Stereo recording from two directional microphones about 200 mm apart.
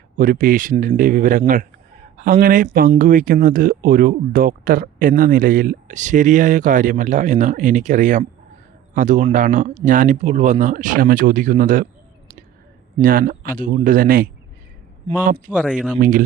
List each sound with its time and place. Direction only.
0.2 s a man's voice: 45° right (ahead or behind)
13.0 s a man's voice: 45° right (ahead or behind)
15.4 s speech: 5° right (ahead or behind)
16.0 s speech: 40° right (ahead or behind)